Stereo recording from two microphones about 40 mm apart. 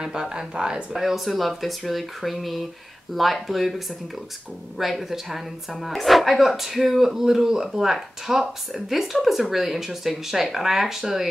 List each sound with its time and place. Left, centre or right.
0.0 s speech: centre
0.9 s speech: centre